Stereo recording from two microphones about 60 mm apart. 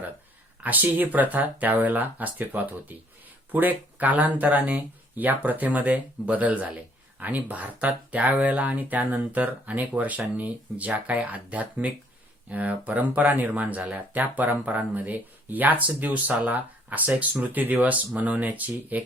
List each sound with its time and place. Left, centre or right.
0.6 s speech: right